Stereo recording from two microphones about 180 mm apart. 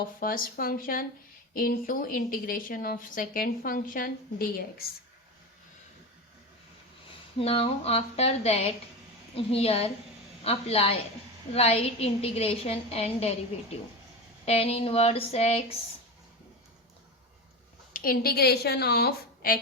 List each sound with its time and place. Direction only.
0.2 s speech: 50° left (ahead or behind)
7.3 s a woman's voice: 35° left (ahead or behind)
14.4 s a woman's voice: 35° left (ahead or behind)
17.9 s a woman's voice: 55° left (ahead or behind)